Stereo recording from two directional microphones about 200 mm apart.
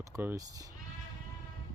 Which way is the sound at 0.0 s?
15° right (ahead or behind).